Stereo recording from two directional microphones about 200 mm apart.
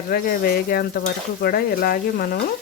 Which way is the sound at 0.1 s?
50° left (ahead or behind).